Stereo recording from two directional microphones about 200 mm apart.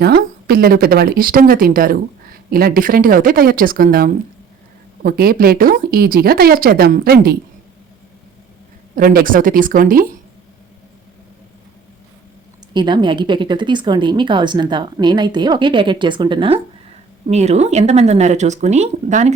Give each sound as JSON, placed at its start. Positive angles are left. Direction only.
{"t": 0.0, "sound": "a woman's voice", "side_deg": -50}
{"t": 9.0, "sound": "a woman's voice", "side_deg": -45}
{"t": 12.7, "sound": "speech", "side_deg": -20}